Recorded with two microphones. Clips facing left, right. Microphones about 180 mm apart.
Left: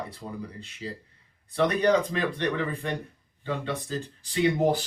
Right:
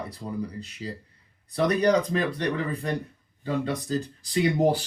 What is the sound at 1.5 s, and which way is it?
Speech, 35° right (ahead or behind).